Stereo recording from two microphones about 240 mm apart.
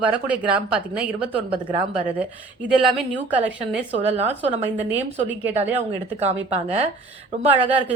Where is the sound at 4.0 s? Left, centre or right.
Right.